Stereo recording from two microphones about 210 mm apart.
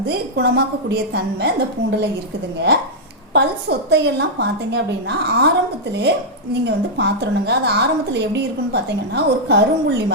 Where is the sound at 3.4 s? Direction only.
55° right (ahead or behind).